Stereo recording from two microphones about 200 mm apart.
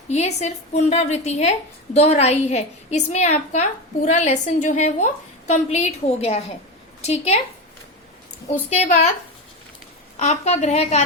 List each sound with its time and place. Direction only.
0.1 s a woman's voice: 35° left (ahead or behind)
8.7 s a woman's voice: 35° left (ahead or behind)
10.2 s a woman's voice: 35° left (ahead or behind)